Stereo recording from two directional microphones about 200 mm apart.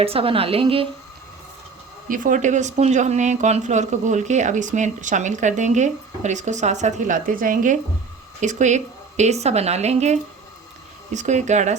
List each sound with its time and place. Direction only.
0.0 s a woman's voice: 30° right (ahead or behind)
2.0 s speech: 40° right (ahead or behind)